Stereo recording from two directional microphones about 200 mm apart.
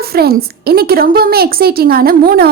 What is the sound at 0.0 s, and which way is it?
A woman's voice, 50° right (ahead or behind).